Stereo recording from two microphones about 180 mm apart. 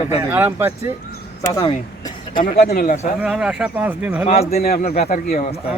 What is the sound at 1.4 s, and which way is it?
Speech, 20° left (ahead or behind).